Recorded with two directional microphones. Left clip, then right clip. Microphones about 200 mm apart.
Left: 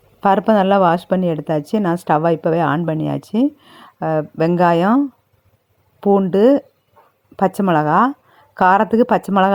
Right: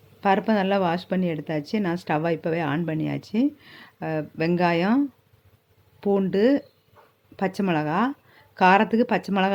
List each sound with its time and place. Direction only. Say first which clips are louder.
0.2 s speech: left 8 dB; 30° left (ahead or behind)